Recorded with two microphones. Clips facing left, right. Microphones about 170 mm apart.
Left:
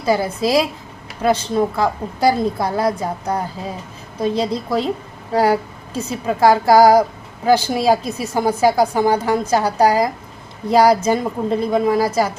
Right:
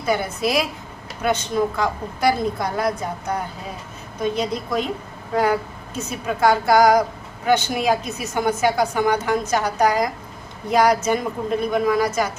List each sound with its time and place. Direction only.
0.0 s a woman's voice: 35° left (ahead or behind)